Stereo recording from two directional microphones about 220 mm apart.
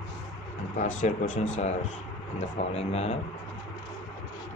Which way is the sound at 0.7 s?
35° left (ahead or behind).